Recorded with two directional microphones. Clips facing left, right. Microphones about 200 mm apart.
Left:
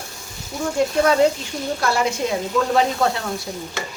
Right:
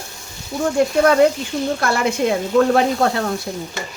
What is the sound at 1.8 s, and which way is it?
Speech, 55° right (ahead or behind).